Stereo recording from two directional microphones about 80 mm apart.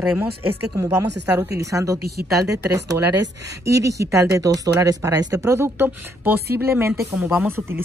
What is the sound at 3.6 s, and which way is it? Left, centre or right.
A woman's voice, right.